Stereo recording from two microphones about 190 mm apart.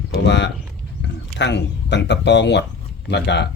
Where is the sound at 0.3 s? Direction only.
65° left (ahead or behind).